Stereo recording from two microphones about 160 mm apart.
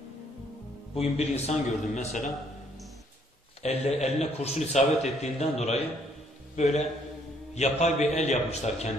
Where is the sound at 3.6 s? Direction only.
40° left (ahead or behind).